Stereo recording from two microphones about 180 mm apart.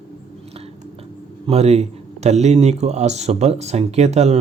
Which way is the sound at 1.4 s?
35° right (ahead or behind).